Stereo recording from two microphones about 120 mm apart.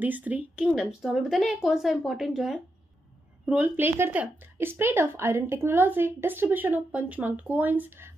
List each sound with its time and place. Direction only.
0.0 s speech: 15° right (ahead or behind)
0.7 s a woman's voice: centre (ahead or behind)
3.4 s speech: 15° right (ahead or behind)